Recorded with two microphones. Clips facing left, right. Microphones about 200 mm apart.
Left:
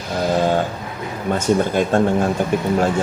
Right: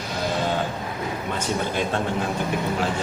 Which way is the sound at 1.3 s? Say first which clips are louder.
Left 11 dB; 45° left (ahead or behind).